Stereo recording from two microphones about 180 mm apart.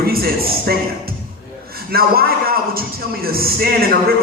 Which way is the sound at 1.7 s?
55° right (ahead or behind).